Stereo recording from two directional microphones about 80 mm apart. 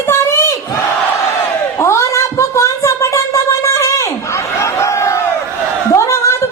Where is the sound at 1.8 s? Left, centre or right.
Left.